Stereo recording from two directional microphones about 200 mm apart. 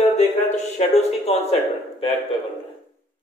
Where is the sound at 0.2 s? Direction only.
35° left (ahead or behind).